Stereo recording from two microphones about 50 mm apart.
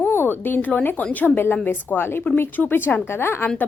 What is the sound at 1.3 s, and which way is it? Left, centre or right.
A woman's voice, left.